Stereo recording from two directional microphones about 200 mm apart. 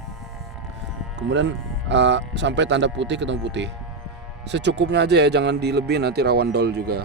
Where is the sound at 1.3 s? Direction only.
65° right (ahead or behind).